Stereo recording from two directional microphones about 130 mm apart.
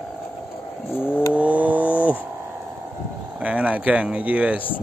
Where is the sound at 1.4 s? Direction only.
10° right (ahead or behind).